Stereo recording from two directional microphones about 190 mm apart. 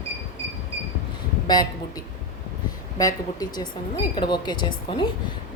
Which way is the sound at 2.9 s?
20° left (ahead or behind).